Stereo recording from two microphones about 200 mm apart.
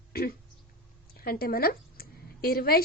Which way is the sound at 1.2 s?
50° left (ahead or behind).